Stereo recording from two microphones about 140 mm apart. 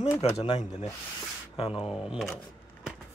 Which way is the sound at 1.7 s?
5° right (ahead or behind).